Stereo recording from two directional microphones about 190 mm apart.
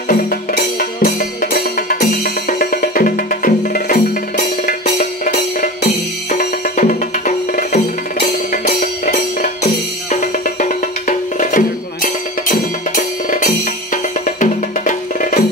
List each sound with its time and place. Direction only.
0.1 s music: 45° left (ahead or behind)